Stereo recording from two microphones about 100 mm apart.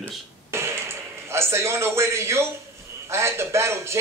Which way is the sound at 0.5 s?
25° right (ahead or behind).